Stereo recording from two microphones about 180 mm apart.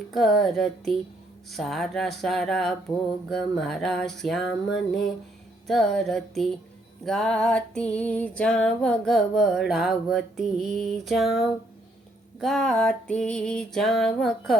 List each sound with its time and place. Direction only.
0.1 s music: centre (ahead or behind)